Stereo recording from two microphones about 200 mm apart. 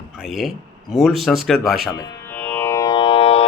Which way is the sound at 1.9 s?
20° left (ahead or behind).